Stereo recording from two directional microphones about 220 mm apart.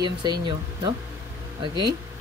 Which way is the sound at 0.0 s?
20° right (ahead or behind).